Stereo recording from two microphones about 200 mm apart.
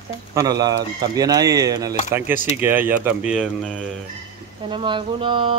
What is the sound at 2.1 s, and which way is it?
Speech, 10° right (ahead or behind).